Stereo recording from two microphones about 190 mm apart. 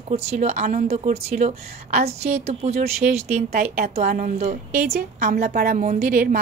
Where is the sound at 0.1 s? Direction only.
35° right (ahead or behind).